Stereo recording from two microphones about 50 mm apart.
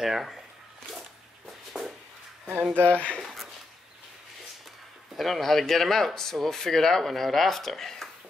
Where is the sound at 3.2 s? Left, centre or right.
Centre.